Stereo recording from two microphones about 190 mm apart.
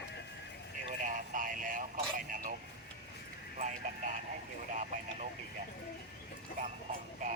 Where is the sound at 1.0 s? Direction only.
45° right (ahead or behind).